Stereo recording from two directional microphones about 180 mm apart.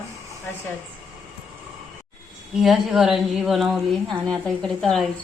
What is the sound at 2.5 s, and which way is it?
A woman's voice, centre (ahead or behind).